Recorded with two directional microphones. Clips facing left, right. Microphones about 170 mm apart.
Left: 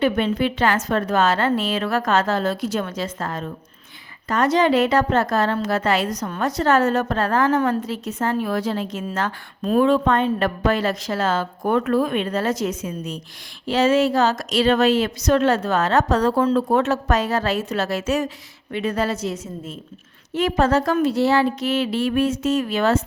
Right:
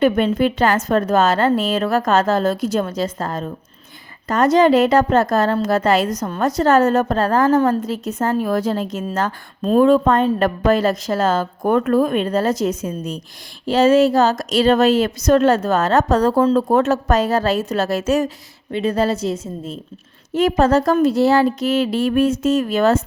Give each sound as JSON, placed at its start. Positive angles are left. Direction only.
{"t": 0.0, "sound": "a woman's voice", "side_deg": -45}
{"t": 9.6, "sound": "speech", "side_deg": -30}
{"t": 9.8, "sound": "a woman's voice", "side_deg": -45}
{"t": 18.7, "sound": "a woman's voice", "side_deg": -30}